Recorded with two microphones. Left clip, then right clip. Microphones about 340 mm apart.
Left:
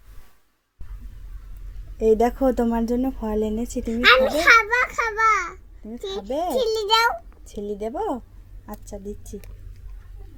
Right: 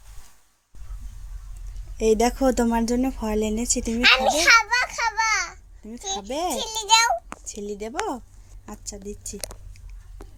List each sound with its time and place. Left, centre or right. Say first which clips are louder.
2.0 s a child's voice: left 2 dB; centre